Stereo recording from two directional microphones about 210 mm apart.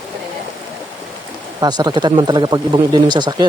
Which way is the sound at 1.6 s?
20° right (ahead or behind).